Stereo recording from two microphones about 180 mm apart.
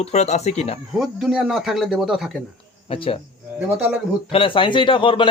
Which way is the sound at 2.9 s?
30° left (ahead or behind).